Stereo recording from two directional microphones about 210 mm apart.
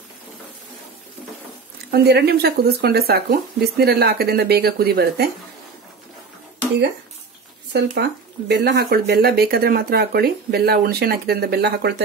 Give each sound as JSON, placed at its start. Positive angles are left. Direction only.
{"t": 1.9, "sound": "speech", "side_deg": -50}
{"t": 7.7, "sound": "speech", "side_deg": -50}